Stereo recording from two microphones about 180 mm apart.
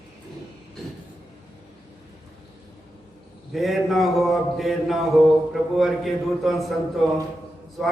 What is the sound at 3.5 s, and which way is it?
A man's voice, centre (ahead or behind).